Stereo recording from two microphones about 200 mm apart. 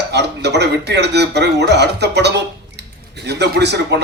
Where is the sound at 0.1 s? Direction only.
55° right (ahead or behind).